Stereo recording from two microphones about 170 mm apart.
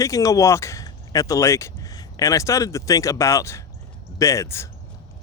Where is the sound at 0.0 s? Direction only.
20° left (ahead or behind).